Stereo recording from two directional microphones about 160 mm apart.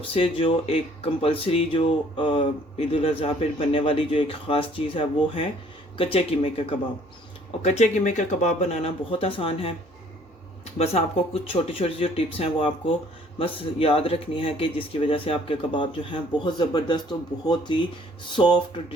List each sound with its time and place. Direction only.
0.0 s speech: 35° left (ahead or behind)
7.6 s speech: 45° left (ahead or behind)
11.4 s speech: 35° left (ahead or behind)